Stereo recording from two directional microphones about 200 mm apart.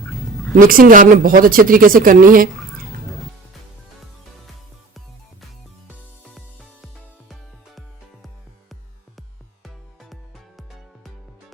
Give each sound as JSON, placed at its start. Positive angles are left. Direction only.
{"t": 0.5, "sound": "speech", "side_deg": -45}
{"t": 9.6, "sound": "music", "side_deg": 0}